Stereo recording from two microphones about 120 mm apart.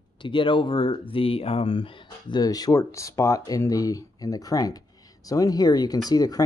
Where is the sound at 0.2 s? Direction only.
45° left (ahead or behind).